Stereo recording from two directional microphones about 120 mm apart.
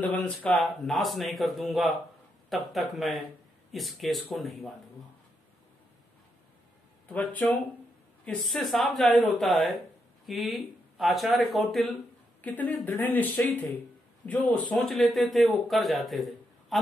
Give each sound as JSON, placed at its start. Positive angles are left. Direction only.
{"t": 0.0, "sound": "a man's voice", "side_deg": 10}
{"t": 7.1, "sound": "speech", "side_deg": 15}
{"t": 8.3, "sound": "a man's voice", "side_deg": 5}
{"t": 12.4, "sound": "speech", "side_deg": 15}
{"t": 14.8, "sound": "a man's voice", "side_deg": 0}